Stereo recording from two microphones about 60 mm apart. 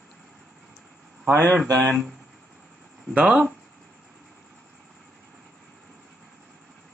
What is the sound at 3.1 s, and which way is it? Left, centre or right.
Speech, centre.